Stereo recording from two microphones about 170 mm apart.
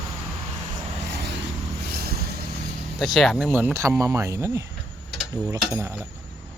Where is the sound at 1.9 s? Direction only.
65° right (ahead or behind).